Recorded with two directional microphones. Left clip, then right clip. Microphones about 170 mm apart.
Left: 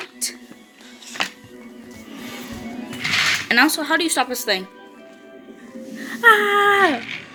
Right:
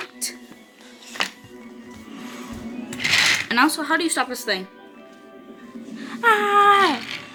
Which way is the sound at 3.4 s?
10° right (ahead or behind).